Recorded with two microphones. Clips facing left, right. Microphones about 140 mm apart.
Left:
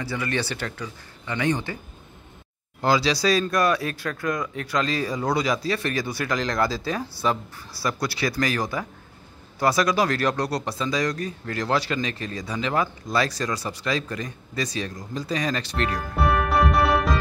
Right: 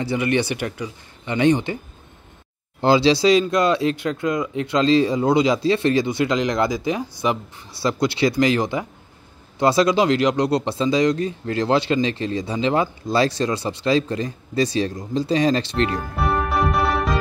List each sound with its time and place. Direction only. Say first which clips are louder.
0.0 s speech: right 7 dB; 20° right (ahead or behind)
2.8 s speech: right 6 dB; 25° right (ahead or behind)
16.2 s music: left 1 dB; centre (ahead or behind)